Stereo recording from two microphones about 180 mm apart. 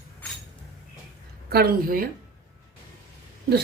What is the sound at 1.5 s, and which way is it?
Speech, 55° right (ahead or behind).